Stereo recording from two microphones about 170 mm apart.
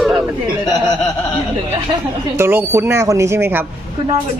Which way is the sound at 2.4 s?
15° right (ahead or behind).